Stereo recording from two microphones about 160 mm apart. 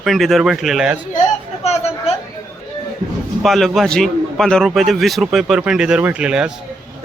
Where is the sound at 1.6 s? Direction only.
40° left (ahead or behind).